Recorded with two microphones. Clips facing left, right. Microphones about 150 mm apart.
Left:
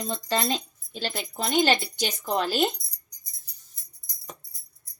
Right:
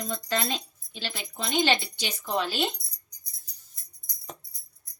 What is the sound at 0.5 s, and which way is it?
Speech, 40° left (ahead or behind).